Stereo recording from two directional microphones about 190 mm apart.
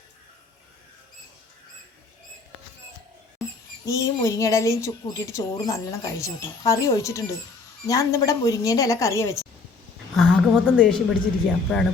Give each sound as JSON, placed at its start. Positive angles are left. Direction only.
{"t": 3.8, "sound": "speech", "side_deg": 15}
{"t": 10.2, "sound": "a woman's voice", "side_deg": 5}